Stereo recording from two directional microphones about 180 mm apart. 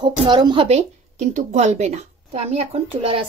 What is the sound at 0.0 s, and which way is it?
A woman's voice, 25° right (ahead or behind).